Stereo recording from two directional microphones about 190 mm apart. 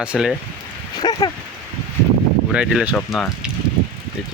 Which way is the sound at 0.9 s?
20° left (ahead or behind).